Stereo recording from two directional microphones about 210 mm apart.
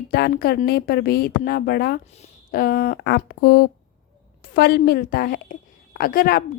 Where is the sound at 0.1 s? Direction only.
45° left (ahead or behind).